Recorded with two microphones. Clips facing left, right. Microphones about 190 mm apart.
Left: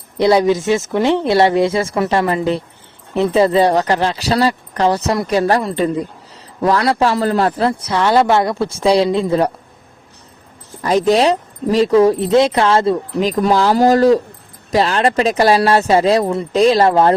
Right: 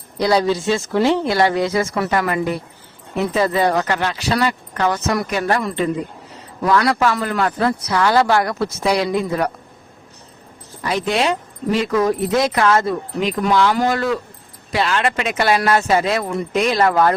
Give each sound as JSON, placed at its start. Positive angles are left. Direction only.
{"t": 0.2, "sound": "a man's voice", "side_deg": 20}
{"t": 10.8, "sound": "speech", "side_deg": 40}